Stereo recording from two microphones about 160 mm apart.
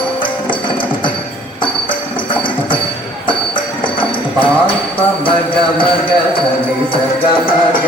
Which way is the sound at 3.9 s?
35° left (ahead or behind).